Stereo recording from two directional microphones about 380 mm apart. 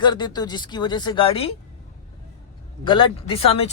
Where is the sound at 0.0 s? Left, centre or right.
Centre.